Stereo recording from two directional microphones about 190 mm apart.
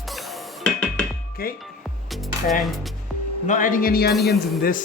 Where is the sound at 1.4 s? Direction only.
50° left (ahead or behind).